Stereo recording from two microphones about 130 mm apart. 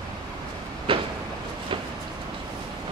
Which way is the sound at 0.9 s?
45° right (ahead or behind).